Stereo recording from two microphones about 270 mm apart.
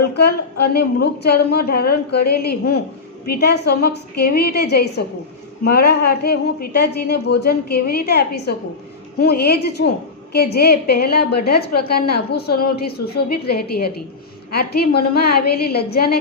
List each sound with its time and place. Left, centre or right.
0.6 s a woman's voice: left